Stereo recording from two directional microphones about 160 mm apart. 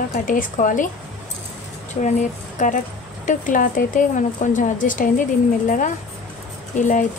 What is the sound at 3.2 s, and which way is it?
Speech, 55° left (ahead or behind).